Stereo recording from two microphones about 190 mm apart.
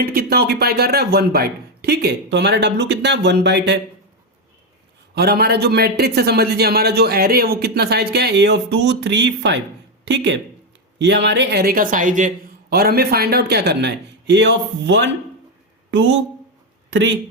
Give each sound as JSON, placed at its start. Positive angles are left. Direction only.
{"t": 0.0, "sound": "a man's voice", "side_deg": -55}
{"t": 5.1, "sound": "a man's voice", "side_deg": -55}
{"t": 12.7, "sound": "a man's voice", "side_deg": -55}